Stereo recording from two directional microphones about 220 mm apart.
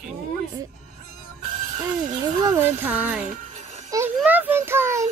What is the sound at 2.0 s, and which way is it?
Music, 15° right (ahead or behind).